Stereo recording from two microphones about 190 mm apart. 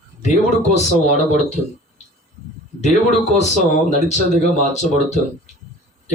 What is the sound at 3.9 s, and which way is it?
Speech, 35° left (ahead or behind).